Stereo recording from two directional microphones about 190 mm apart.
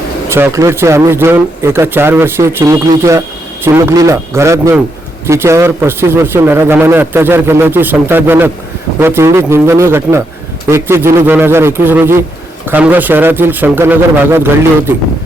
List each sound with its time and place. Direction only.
0.3 s a man's voice: 10° right (ahead or behind)